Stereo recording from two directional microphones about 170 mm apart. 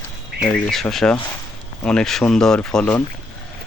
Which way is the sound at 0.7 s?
Centre (ahead or behind).